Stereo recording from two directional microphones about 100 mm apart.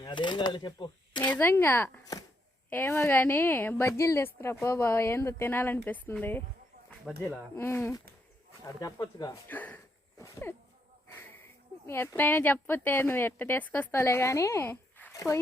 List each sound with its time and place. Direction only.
0.0 s speech: 50° left (ahead or behind)
1.3 s a woman's voice: 20° left (ahead or behind)
7.2 s a woman's voice: 25° left (ahead or behind)
9.0 s speech: 40° left (ahead or behind)
9.5 s speech: 15° left (ahead or behind)
11.1 s a sound: 20° left (ahead or behind)
11.9 s a woman's voice: 20° left (ahead or behind)
15.1 s a sound: 30° left (ahead or behind)